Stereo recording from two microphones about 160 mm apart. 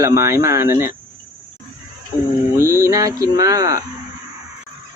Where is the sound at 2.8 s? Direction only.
20° right (ahead or behind).